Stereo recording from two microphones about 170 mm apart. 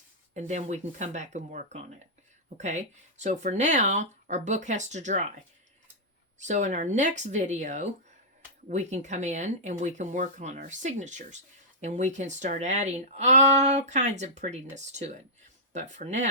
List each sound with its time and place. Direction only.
0.3 s speech: 45° right (ahead or behind)
6.4 s speech: 45° right (ahead or behind)